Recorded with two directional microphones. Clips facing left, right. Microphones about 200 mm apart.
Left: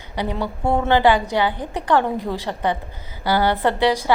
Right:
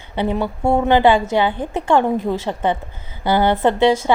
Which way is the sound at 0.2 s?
25° right (ahead or behind).